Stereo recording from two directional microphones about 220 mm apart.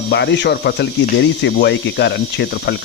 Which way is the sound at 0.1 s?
50° left (ahead or behind).